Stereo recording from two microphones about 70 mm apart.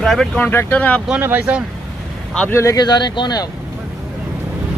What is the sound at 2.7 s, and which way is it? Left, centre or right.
Speech, left.